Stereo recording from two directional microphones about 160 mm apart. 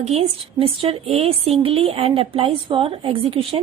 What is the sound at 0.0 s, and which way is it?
A woman's voice, 40° right (ahead or behind).